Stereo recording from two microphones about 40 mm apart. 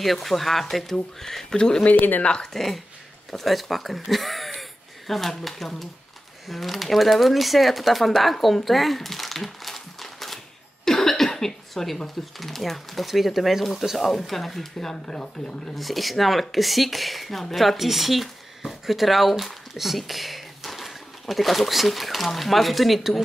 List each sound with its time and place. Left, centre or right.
0.0 s speech: centre; by 1.9 s left
1.9 s speech: left
2.2 s speech: left
2.5 s speech: centre
10.9 s cough: centre
12.4 s speech: centre
15.7 s speech: centre